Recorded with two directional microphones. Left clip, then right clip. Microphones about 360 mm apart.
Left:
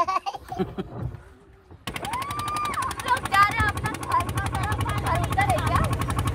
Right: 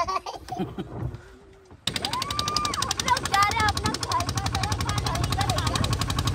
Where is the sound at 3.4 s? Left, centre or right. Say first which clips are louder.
Left 4 dB; centre.